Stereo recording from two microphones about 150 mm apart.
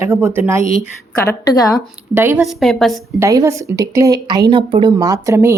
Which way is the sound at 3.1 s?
20° right (ahead or behind).